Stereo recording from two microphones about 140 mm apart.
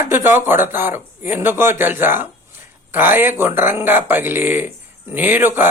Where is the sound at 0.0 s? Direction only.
15° right (ahead or behind).